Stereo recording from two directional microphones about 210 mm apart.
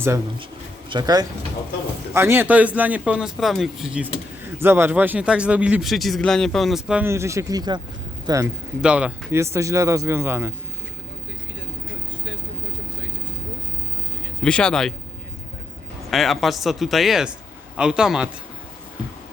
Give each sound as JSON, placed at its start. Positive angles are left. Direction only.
{"t": 0.9, "sound": "a man's voice", "side_deg": -20}
{"t": 8.8, "sound": "a man's voice", "side_deg": -5}
{"t": 14.4, "sound": "speech", "side_deg": 5}
{"t": 16.0, "sound": "speech", "side_deg": 0}